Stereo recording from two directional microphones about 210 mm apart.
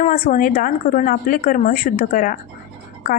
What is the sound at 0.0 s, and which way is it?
A woman's voice, 40° left (ahead or behind).